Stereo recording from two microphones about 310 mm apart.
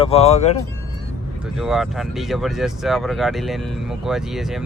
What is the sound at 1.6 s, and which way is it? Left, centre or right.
Speech, centre.